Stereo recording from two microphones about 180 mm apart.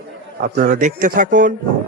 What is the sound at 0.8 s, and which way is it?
Speech, 45° right (ahead or behind).